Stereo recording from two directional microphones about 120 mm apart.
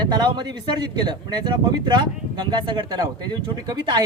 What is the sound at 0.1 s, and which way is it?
Speech, 40° right (ahead or behind).